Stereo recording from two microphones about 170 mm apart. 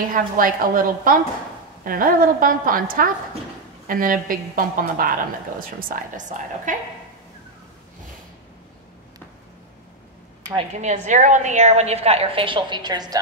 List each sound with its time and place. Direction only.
0.1 s a woman's voice: 55° right (ahead or behind)
10.7 s a woman's voice: 45° right (ahead or behind); by 13.2 s 25° right (ahead or behind)